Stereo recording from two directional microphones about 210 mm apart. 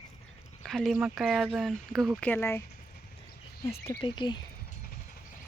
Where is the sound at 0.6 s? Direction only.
Centre (ahead or behind).